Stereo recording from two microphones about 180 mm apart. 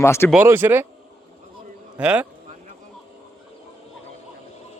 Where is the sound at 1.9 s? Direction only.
10° right (ahead or behind).